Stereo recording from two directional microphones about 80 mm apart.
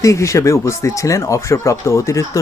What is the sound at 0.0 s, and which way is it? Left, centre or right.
Speech, left.